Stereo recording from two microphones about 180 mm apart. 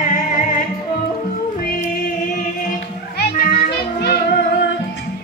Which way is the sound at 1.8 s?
45° left (ahead or behind).